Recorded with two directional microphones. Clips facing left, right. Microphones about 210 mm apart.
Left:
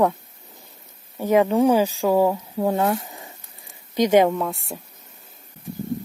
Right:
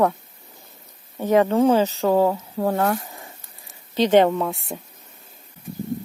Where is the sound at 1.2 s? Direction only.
10° left (ahead or behind).